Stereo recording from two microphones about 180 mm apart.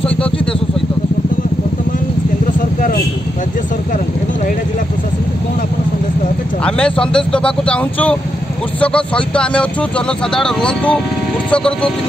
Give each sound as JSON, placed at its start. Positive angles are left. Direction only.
{"t": 0.1, "sound": "vehicle", "side_deg": 5}
{"t": 2.4, "sound": "vehicle", "side_deg": 50}
{"t": 6.6, "sound": "speech", "side_deg": 5}